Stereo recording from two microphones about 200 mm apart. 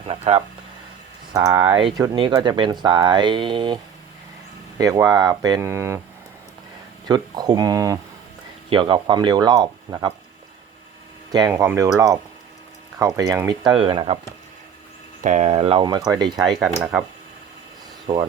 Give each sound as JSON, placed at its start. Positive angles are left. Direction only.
{"t": 0.1, "sound": "speech", "side_deg": -30}
{"t": 1.3, "sound": "speech", "side_deg": -20}
{"t": 1.7, "sound": "speech", "side_deg": -25}
{"t": 4.8, "sound": "speech", "side_deg": -15}
{"t": 7.1, "sound": "speech", "side_deg": -20}
{"t": 11.3, "sound": "speech", "side_deg": -20}
{"t": 15.2, "sound": "speech", "side_deg": -40}
{"t": 18.1, "sound": "speech", "side_deg": -25}